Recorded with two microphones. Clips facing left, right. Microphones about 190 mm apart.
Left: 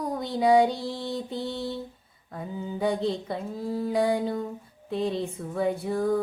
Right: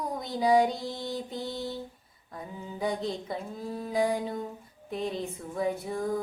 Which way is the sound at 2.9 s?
30° left (ahead or behind).